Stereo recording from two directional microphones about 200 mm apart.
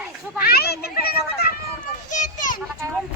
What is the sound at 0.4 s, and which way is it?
A child's voice, 50° left (ahead or behind).